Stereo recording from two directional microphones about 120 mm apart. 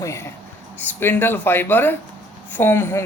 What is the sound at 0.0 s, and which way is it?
A woman's voice, 20° left (ahead or behind).